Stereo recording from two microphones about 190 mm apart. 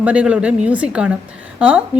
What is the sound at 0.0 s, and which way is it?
A woman's voice, 5° right (ahead or behind).